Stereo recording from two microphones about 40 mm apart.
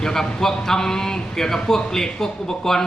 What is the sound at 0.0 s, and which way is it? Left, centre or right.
A man's voice, centre.